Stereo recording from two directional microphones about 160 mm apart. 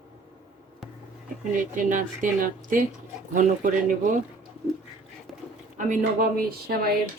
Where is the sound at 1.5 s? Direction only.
55° right (ahead or behind).